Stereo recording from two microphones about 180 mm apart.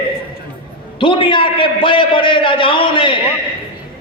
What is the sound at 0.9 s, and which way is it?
A man's voice, 30° left (ahead or behind).